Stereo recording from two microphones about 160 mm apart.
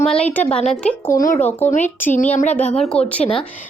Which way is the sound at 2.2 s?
50° left (ahead or behind).